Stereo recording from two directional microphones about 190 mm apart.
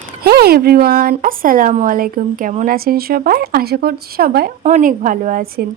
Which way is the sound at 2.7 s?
50° right (ahead or behind).